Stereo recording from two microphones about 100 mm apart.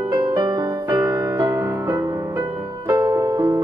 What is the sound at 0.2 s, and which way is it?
Music, 55° right (ahead or behind).